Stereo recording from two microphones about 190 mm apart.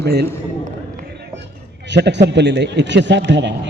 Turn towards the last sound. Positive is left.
turn(degrees=-70)  # may be behind; listen again after turning